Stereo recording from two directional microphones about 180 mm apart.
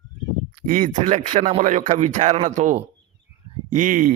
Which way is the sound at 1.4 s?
45° right (ahead or behind).